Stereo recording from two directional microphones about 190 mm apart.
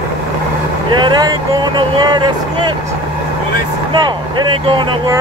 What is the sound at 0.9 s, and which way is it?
Speech, 25° right (ahead or behind).